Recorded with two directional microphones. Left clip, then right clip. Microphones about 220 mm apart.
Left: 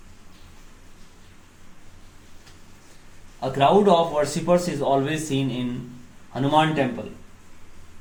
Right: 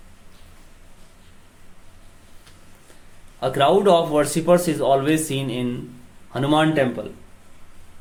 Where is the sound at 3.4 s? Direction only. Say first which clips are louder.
Right 1 dB; 35° right (ahead or behind).